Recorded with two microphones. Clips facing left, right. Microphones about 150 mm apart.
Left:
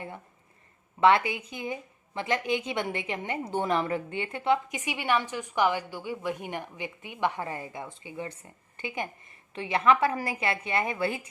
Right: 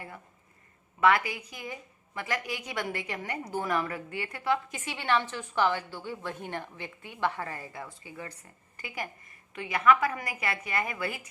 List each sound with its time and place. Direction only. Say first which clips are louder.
0.9 s a woman's voice: left 3 dB; 25° left (ahead or behind)